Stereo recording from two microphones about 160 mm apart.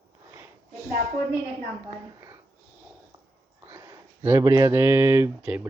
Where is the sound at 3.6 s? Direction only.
20° right (ahead or behind).